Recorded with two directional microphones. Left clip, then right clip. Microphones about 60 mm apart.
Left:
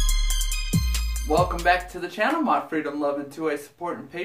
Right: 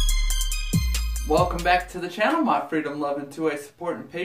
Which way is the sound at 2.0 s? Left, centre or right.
Left.